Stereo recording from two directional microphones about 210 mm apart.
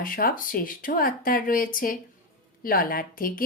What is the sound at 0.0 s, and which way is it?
A woman's voice, 40° left (ahead or behind).